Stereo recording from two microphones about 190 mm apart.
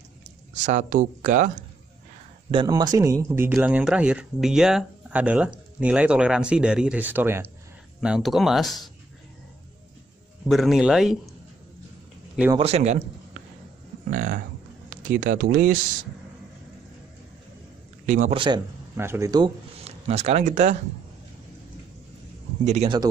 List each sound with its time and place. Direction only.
0.6 s speech: 40° right (ahead or behind)
2.5 s speech: 20° right (ahead or behind); by 8.9 s centre (ahead or behind)
10.5 s speech: centre (ahead or behind)
12.5 s a man's voice: 35° right (ahead or behind)
14.1 s speech: 45° right (ahead or behind)
18.0 s a man's voice: 45° right (ahead or behind)
18.3 s a man's voice: 25° right (ahead or behind)
18.9 s speech: 15° right (ahead or behind)
19.8 s speech: 35° right (ahead or behind)
22.7 s a man's voice: 35° right (ahead or behind)